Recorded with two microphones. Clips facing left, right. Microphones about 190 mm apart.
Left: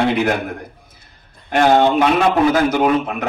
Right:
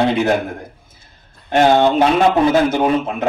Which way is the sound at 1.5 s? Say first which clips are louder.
Right 1 dB; 25° right (ahead or behind).